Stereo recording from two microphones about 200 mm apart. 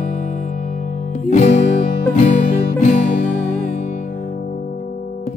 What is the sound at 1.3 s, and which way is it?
Music, 35° left (ahead or behind).